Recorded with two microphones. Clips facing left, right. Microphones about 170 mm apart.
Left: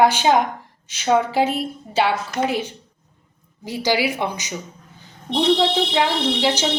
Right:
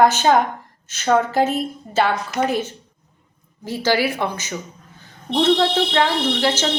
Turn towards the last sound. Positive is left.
turn(degrees=10)  # may be behind; listen again after turning